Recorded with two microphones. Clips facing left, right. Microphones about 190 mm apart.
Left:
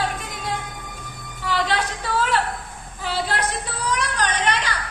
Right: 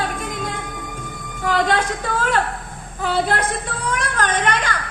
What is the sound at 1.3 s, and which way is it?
A woman's voice, 50° right (ahead or behind).